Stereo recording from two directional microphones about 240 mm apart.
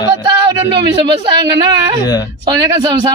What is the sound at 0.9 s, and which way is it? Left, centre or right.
A woman's voice, centre.